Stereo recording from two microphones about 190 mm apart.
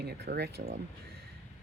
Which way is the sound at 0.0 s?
60° right (ahead or behind).